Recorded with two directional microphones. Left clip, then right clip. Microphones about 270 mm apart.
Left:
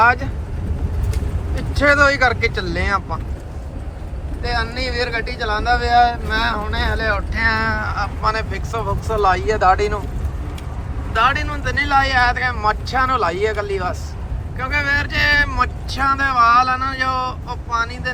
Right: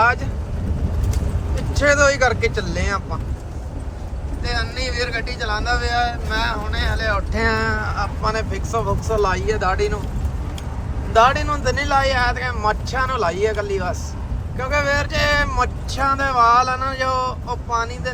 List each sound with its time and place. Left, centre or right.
0.0 s speech: centre
1.7 s speech: centre
4.4 s speech: centre
11.1 s speech: right
14.6 s speech: centre